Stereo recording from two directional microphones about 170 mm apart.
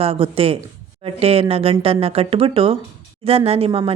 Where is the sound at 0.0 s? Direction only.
35° right (ahead or behind).